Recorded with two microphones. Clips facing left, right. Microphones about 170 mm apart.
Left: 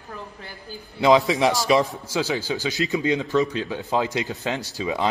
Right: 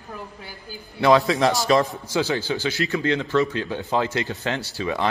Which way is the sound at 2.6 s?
15° left (ahead or behind).